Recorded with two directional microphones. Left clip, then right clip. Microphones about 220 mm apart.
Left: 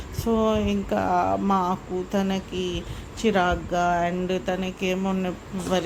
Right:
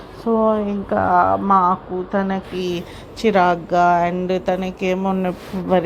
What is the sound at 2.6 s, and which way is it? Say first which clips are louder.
A woman's voice: right 5 dB; 10° right (ahead or behind).